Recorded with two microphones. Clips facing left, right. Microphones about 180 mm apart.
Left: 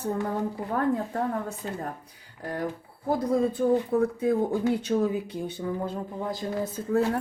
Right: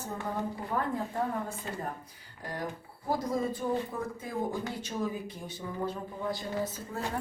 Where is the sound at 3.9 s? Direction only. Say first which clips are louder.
Left 12 dB; 65° left (ahead or behind).